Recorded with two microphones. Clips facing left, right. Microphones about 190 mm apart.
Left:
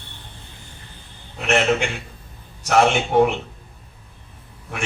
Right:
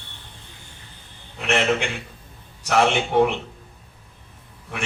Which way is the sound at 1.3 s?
45° left (ahead or behind).